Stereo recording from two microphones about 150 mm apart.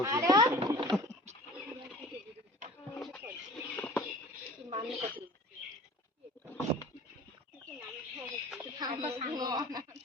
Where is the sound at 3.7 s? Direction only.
10° left (ahead or behind).